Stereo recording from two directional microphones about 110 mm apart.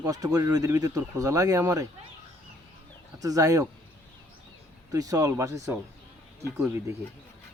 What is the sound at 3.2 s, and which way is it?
Speech, 35° right (ahead or behind).